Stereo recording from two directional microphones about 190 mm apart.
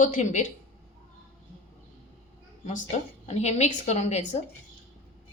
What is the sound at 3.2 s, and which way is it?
Speech, 35° left (ahead or behind).